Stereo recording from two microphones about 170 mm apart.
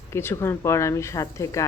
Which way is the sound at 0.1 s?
15° left (ahead or behind).